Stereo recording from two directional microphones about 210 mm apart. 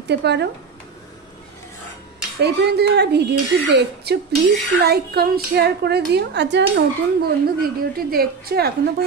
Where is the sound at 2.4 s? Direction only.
50° right (ahead or behind).